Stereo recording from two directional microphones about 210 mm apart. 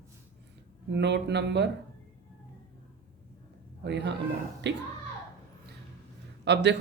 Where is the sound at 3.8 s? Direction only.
55° right (ahead or behind).